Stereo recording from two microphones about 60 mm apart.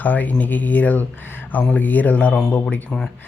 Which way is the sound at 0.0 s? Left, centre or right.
Left.